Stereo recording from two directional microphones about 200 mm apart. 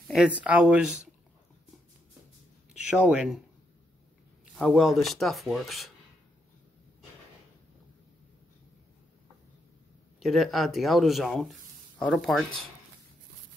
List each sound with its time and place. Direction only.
0.1 s speech: 5° right (ahead or behind)
3.0 s speech: 5° right (ahead or behind)
4.6 s speech: centre (ahead or behind)
10.2 s speech: centre (ahead or behind)